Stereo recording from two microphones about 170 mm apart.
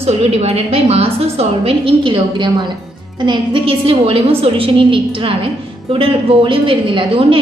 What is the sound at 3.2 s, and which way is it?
A woman's voice, 30° right (ahead or behind).